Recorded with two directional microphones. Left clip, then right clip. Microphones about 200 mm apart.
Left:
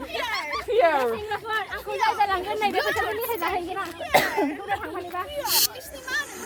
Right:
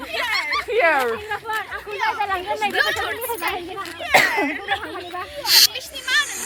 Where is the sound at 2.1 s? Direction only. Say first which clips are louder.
Right 1 dB; 50° left (ahead or behind).